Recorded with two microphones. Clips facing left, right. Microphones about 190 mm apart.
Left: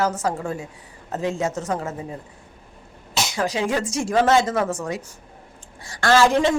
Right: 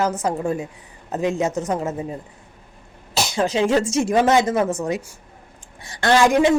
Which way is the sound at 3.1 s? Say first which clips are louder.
Right 3 dB; 25° right (ahead or behind).